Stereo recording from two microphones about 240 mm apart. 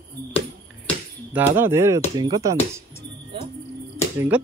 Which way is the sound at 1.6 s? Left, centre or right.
Centre.